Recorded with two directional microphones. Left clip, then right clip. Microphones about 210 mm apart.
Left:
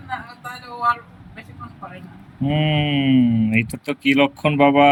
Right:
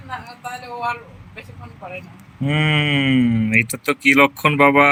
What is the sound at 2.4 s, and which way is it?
Speech, 35° right (ahead or behind).